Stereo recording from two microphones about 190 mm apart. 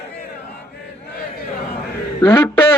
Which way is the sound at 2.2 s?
20° left (ahead or behind).